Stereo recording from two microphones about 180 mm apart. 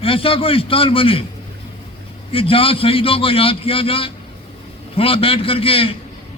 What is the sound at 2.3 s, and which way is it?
A man's voice, 30° left (ahead or behind).